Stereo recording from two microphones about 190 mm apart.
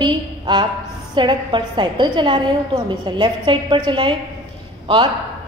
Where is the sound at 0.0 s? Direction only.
25° right (ahead or behind).